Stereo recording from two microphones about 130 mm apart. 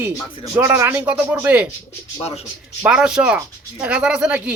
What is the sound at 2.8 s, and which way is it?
Speech, 5° right (ahead or behind).